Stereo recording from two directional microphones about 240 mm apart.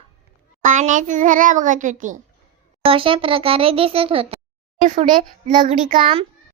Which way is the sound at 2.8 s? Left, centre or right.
Right.